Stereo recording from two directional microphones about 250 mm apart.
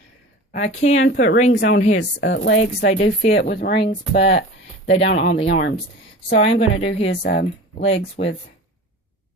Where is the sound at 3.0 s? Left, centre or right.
Left.